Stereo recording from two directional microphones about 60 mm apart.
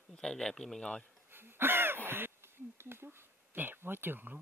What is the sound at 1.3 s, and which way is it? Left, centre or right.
Speech, right.